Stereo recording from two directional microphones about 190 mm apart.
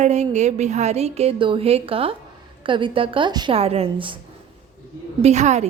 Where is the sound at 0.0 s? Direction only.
35° right (ahead or behind).